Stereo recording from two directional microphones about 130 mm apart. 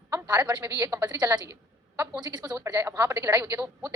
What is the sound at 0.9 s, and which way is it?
A woman's voice, 25° right (ahead or behind).